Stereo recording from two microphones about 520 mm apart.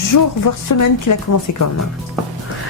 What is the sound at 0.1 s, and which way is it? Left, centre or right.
A woman's voice, left.